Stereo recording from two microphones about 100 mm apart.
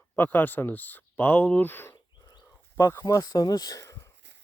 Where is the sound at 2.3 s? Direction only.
45° left (ahead or behind).